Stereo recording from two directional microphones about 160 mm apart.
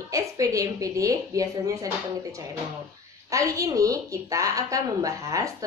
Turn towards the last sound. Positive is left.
turn(degrees=-20)  # may be behind; listen again after turning